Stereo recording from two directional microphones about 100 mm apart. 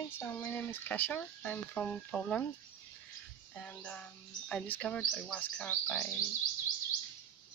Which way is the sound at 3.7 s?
15° left (ahead or behind).